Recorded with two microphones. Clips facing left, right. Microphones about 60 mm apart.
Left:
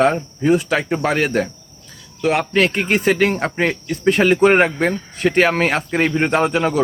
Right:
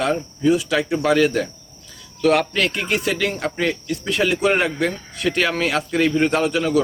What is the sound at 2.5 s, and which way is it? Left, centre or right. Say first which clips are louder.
Speech: left 5 dB; left.